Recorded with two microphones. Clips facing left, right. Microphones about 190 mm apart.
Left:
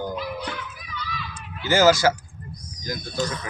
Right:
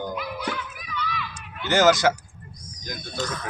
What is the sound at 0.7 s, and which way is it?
Children playing, 30° left (ahead or behind).